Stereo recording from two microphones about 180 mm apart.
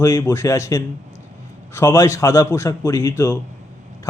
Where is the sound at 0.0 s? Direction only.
15° left (ahead or behind).